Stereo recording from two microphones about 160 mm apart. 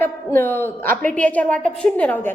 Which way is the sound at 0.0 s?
15° left (ahead or behind).